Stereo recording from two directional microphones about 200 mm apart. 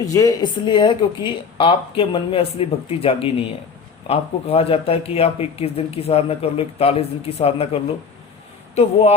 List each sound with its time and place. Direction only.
0.0 s speech: 15° left (ahead or behind)